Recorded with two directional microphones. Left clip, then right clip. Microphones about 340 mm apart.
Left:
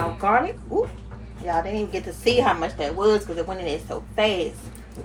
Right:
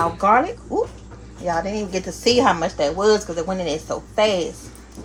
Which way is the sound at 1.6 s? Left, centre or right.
Right.